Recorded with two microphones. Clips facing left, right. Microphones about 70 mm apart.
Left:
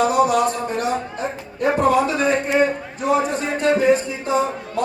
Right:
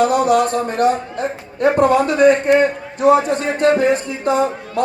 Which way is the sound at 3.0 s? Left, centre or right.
Right.